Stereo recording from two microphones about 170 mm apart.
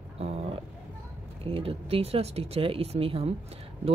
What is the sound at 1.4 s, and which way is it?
Speech, 35° right (ahead or behind).